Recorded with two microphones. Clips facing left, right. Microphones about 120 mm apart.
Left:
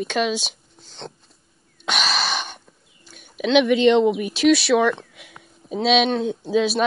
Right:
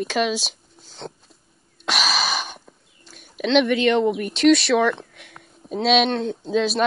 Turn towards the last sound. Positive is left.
turn(degrees=0)  # may be behind; listen again after turning